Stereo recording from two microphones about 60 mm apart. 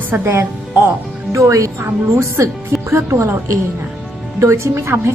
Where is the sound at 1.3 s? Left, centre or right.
Right.